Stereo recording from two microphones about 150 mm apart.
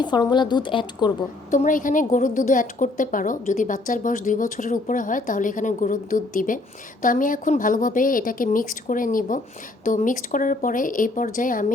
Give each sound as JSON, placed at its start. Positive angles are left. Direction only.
{"t": 0.0, "sound": "a woman's voice", "side_deg": 30}
{"t": 1.5, "sound": "a woman's voice", "side_deg": 60}